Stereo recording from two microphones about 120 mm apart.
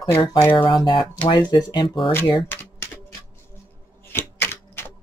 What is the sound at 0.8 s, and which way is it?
Speech, 45° left (ahead or behind).